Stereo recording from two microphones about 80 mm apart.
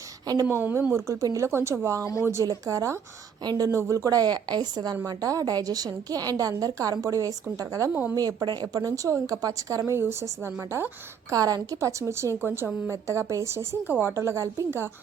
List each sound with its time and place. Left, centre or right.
0.4 s a woman's voice: right
0.9 s a woman's voice: right
11.3 s a woman's voice: right
12.9 s speech: right